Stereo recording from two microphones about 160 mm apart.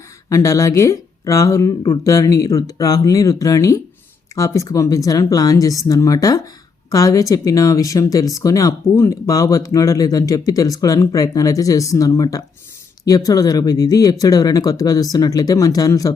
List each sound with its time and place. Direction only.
0.3 s speech: 20° left (ahead or behind)